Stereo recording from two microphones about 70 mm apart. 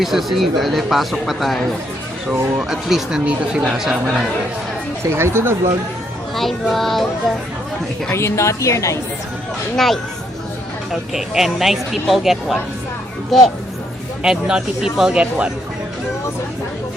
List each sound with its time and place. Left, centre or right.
0.0 s speech: centre
5.1 s speech: right
6.3 s speech: centre
8.1 s a woman's voice: left
9.7 s speech: centre
11.1 s speech: centre
14.2 s speech: centre